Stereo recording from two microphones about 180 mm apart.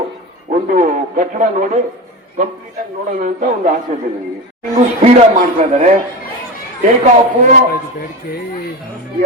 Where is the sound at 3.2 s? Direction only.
45° right (ahead or behind).